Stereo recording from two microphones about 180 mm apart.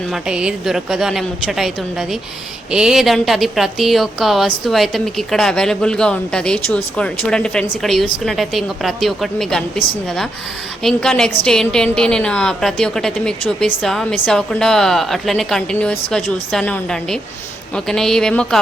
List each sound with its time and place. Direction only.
0.1 s speech: 5° right (ahead or behind)
10.8 s speech: 5° left (ahead or behind)